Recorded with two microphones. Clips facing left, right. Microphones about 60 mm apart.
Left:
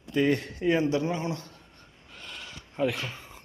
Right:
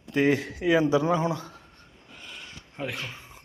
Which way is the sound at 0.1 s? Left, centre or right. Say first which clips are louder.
Right 2 dB; right.